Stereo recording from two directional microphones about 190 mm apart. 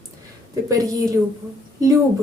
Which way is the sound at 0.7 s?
20° right (ahead or behind).